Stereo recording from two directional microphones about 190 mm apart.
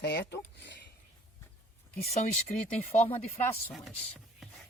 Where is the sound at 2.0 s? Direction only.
35° left (ahead or behind).